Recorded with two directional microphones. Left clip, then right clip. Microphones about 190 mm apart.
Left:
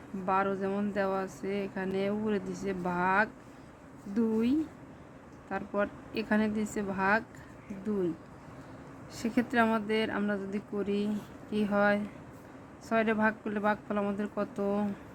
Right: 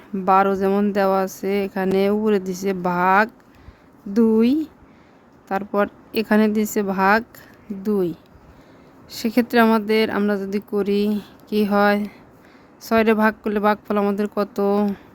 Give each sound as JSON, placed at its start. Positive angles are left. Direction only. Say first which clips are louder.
{"t": 0.3, "sound": "speech", "louder": "right 13 dB", "side_deg": -60}
{"t": 9.0, "sound": "speech", "louder": "right 11 dB", "side_deg": -55}